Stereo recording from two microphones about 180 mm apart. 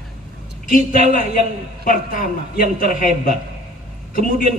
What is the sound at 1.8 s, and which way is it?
A man's voice, 50° left (ahead or behind).